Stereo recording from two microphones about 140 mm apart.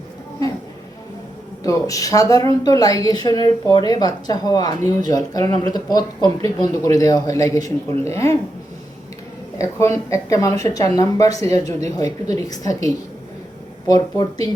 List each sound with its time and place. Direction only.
1.6 s a woman's voice: 25° left (ahead or behind)
9.6 s a woman's voice: 20° left (ahead or behind)